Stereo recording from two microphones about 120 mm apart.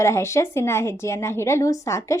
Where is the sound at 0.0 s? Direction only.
25° left (ahead or behind).